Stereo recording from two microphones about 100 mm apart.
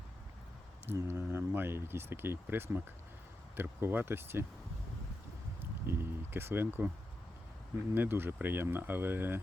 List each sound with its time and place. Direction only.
0.9 s speech: 25° right (ahead or behind)
5.5 s a sound: 25° right (ahead or behind)
7.9 s speech: 20° right (ahead or behind)